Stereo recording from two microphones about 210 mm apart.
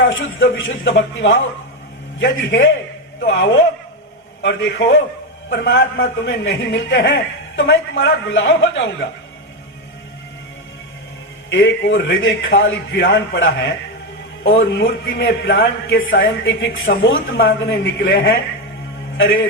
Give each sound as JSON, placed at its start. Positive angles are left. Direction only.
{"t": 0.1, "sound": "a man's voice", "side_deg": 60}
{"t": 5.5, "sound": "a man's voice", "side_deg": 50}
{"t": 11.5, "sound": "a man's voice", "side_deg": 65}
{"t": 19.1, "sound": "a man's voice", "side_deg": 60}